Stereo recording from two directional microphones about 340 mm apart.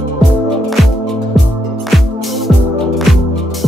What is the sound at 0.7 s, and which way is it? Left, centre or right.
Music, centre.